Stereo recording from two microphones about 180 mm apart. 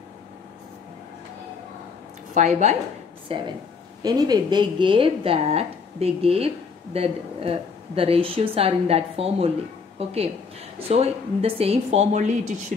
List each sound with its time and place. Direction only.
2.3 s speech: 40° right (ahead or behind)
3.3 s speech: 30° right (ahead or behind)